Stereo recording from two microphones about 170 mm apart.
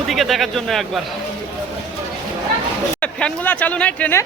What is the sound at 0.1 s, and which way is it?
Speech, centre (ahead or behind).